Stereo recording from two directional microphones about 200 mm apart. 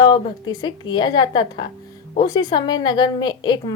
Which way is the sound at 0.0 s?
20° left (ahead or behind).